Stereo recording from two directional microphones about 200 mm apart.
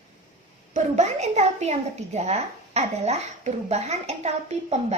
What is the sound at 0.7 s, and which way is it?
A woman's voice, 35° right (ahead or behind).